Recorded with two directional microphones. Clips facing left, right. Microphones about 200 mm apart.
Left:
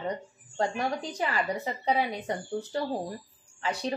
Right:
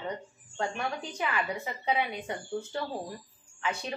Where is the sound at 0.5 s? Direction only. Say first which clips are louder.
Left 4 dB; 35° left (ahead or behind).